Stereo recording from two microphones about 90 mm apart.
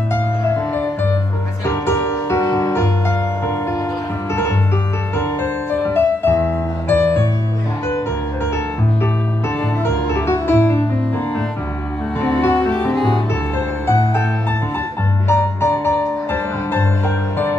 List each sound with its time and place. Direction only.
0.1 s music: 25° left (ahead or behind)
5.2 s music: 25° left (ahead or behind)
9.8 s music: 25° left (ahead or behind)
12.2 s music: 25° left (ahead or behind)
13.8 s music: 25° left (ahead or behind)
15.2 s music: 25° left (ahead or behind)